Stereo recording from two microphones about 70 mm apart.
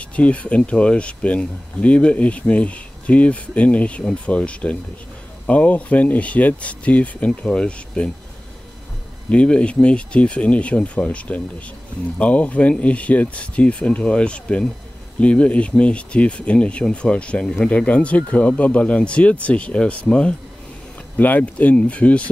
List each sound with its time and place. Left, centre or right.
0.1 s speech: centre
9.3 s speech: centre